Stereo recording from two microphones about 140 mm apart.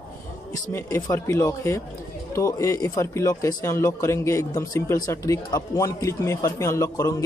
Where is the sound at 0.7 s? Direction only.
20° left (ahead or behind).